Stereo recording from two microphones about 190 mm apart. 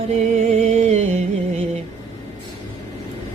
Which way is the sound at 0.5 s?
35° right (ahead or behind).